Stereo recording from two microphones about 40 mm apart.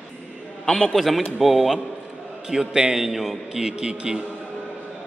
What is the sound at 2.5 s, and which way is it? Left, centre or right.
Speech, centre.